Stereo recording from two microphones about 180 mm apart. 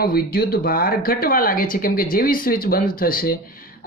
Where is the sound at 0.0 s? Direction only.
55° left (ahead or behind).